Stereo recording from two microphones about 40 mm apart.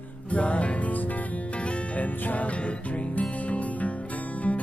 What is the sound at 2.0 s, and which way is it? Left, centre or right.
Music, left.